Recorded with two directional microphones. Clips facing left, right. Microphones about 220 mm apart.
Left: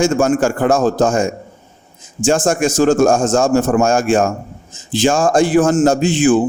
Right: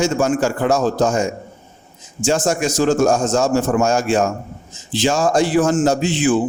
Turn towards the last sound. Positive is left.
turn(degrees=45)  # may be behind; listen again after turning